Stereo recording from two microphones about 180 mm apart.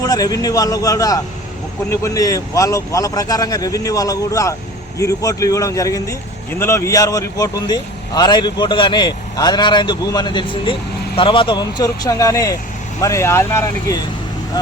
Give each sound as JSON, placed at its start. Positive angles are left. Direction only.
{"t": 0.0, "sound": "speech", "side_deg": 20}